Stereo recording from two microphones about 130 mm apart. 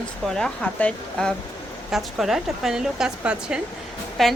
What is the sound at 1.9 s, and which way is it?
Speech, centre (ahead or behind).